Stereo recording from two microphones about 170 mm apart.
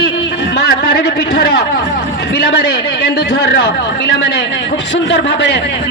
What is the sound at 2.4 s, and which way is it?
A man's voice, 85° left.